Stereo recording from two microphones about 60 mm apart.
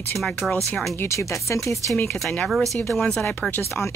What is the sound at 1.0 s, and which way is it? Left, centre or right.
Speech, left.